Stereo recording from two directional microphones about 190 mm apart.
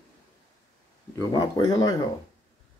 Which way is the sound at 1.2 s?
20° left (ahead or behind).